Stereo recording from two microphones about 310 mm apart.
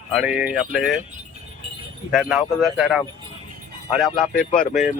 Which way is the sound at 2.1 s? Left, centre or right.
Centre.